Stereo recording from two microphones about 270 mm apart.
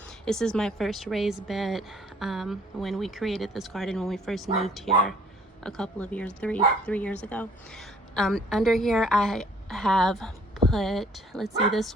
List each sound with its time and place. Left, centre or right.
0.3 s speech: centre